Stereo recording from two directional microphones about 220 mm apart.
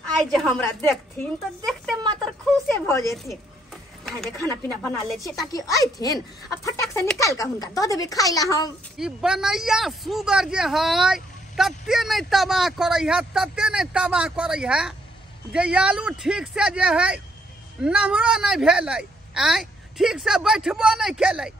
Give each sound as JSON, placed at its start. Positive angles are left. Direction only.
{"t": 0.1, "sound": "speech", "side_deg": 0}
{"t": 1.7, "sound": "a sound", "side_deg": 0}
{"t": 2.9, "sound": "speech", "side_deg": 15}
{"t": 4.0, "sound": "speech", "side_deg": 0}
{"t": 5.2, "sound": "speech", "side_deg": 15}
{"t": 8.9, "sound": "speech", "side_deg": 0}